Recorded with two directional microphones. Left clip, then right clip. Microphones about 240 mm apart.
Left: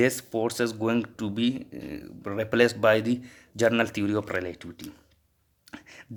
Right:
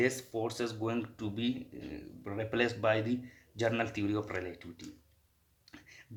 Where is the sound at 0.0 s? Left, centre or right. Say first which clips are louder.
Left 7 dB; left.